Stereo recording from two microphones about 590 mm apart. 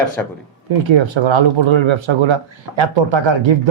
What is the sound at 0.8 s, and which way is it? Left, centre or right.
Speech, right.